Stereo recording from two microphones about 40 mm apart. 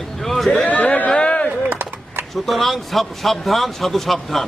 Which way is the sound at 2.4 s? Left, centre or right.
Centre.